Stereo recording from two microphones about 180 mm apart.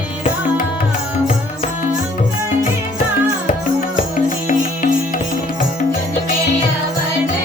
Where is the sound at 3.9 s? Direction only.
45° left (ahead or behind).